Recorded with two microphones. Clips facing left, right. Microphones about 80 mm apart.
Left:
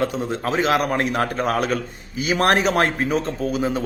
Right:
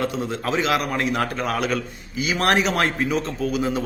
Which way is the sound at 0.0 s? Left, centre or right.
Left.